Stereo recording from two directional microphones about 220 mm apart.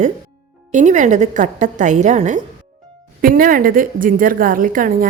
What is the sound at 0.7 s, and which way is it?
A woman's voice, 35° right (ahead or behind).